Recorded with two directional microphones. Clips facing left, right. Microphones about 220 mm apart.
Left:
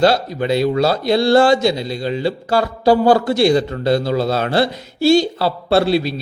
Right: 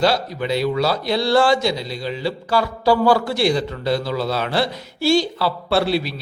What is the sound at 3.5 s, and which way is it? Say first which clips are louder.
A man's voice: left 5 dB; 50° left (ahead or behind).